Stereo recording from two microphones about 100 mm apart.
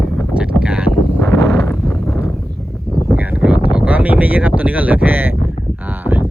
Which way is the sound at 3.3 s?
15° right (ahead or behind).